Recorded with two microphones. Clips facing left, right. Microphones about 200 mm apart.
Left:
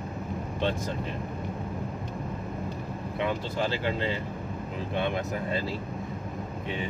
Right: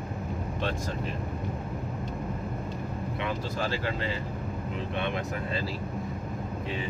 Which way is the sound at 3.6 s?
20° left (ahead or behind).